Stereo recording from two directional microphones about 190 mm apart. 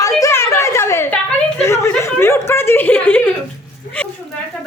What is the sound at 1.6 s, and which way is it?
Chuckle, 15° left (ahead or behind).